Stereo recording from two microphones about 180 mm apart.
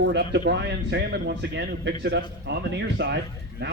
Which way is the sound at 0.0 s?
70° right (ahead or behind).